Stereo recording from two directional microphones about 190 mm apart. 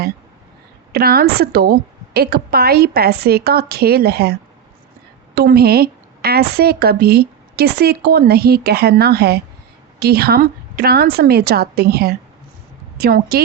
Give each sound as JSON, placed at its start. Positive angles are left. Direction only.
{"t": 0.9, "sound": "a woman's voice", "side_deg": -55}